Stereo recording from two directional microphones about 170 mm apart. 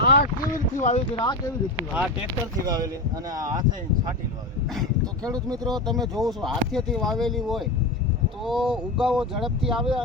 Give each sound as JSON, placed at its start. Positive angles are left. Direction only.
{"t": 0.0, "sound": "boat", "side_deg": 65}
{"t": 0.8, "sound": "speech", "side_deg": 45}
{"t": 1.2, "sound": "speech", "side_deg": 20}
{"t": 2.6, "sound": "speech", "side_deg": -25}
{"t": 4.7, "sound": "speech", "side_deg": 0}